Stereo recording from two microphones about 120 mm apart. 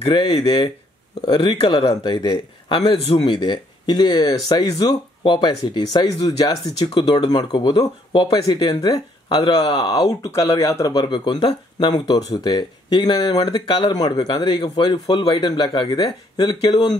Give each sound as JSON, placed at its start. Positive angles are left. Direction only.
{"t": 0.0, "sound": "speech", "side_deg": 40}